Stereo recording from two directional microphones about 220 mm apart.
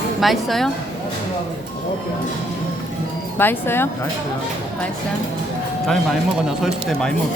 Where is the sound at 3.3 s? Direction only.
10° left (ahead or behind).